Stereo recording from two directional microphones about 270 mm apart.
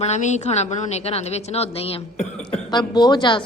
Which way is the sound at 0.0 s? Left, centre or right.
Left.